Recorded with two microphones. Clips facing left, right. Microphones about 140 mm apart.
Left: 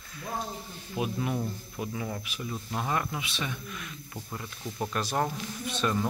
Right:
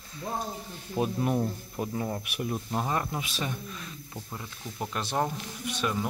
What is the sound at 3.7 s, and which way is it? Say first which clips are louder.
Speech: even; 30° right (ahead or behind).